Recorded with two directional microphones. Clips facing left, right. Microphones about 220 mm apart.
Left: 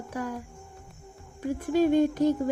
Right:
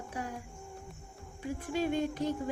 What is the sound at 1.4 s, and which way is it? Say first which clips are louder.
A woman's voice: left 9 dB; 45° left (ahead or behind).